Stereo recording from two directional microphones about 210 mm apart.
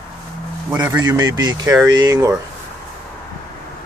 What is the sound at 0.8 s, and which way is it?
Speech, 15° right (ahead or behind).